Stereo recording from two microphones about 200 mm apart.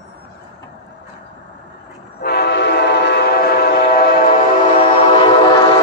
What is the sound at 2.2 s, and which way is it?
Train, 55° left (ahead or behind).